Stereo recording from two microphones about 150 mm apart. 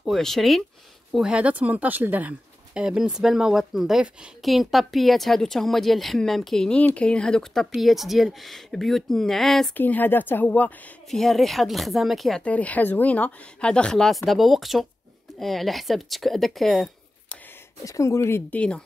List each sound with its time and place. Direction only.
0.0 s speech: centre (ahead or behind)
17.8 s speech: 20° left (ahead or behind)